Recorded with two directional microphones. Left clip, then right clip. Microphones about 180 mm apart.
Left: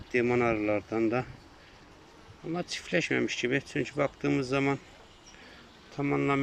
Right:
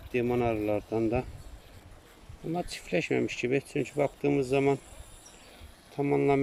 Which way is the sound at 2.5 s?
20° right (ahead or behind).